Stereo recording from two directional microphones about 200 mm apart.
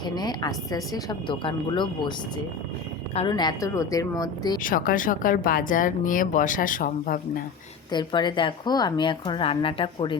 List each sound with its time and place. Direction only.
0.0 s a woman's voice: 20° left (ahead or behind)
3.2 s a woman's voice: 20° left (ahead or behind)
4.6 s speech: 45° left (ahead or behind)
7.9 s a woman's voice: 20° left (ahead or behind)